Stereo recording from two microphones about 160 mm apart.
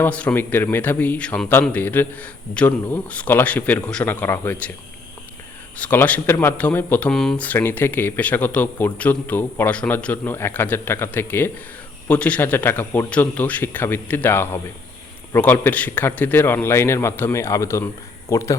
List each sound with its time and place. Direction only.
0.0 s speech: 10° left (ahead or behind)
5.7 s speech: 10° left (ahead or behind)